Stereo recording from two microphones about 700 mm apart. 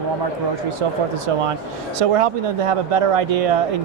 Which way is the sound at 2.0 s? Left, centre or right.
Right.